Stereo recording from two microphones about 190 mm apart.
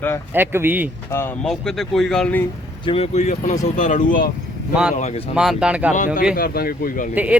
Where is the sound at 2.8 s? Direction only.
30° left (ahead or behind).